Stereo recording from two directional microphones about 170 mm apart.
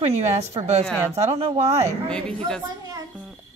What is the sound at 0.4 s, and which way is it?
A woman's voice, 40° right (ahead or behind).